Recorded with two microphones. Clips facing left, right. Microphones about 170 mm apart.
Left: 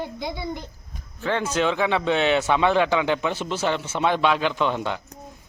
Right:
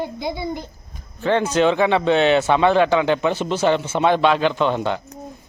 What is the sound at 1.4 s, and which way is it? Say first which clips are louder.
A child's voice: right 5 dB; 5° left (ahead or behind).